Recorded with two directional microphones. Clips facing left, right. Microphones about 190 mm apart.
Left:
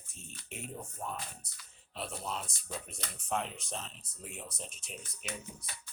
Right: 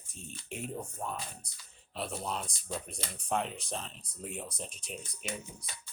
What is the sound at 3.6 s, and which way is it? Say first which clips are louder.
Speech: right 3 dB; centre (ahead or behind).